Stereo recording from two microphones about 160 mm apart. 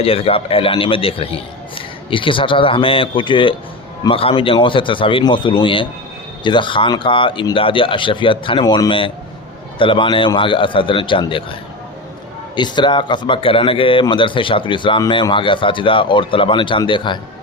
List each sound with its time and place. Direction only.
0.0 s a man's voice: 35° left (ahead or behind)
12.5 s a man's voice: 30° left (ahead or behind)